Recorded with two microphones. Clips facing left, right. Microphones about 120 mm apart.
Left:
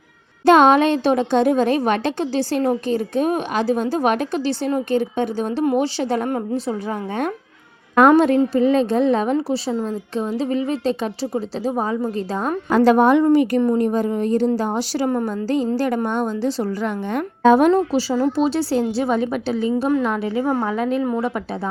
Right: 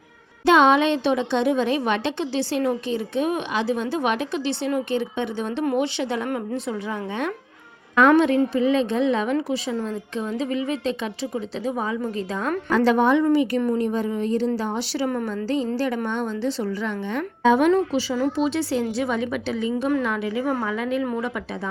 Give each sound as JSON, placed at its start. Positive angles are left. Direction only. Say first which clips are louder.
{"t": 0.4, "sound": "a woman's voice", "louder": "left 4 dB", "side_deg": 45}